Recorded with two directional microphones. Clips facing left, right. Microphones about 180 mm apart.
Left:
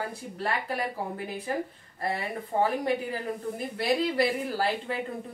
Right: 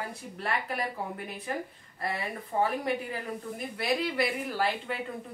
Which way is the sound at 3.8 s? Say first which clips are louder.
Left 3 dB; 35° left (ahead or behind).